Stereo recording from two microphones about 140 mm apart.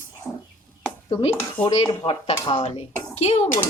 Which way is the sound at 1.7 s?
45° left (ahead or behind).